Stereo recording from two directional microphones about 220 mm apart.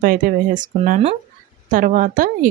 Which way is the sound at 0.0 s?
40° right (ahead or behind).